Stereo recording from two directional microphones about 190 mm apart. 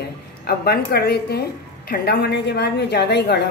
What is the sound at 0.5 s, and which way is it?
A woman's voice, 55° left (ahead or behind).